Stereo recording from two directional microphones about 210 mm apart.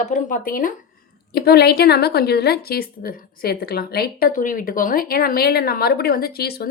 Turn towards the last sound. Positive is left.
turn(degrees=50)  # may be behind; listen again after turning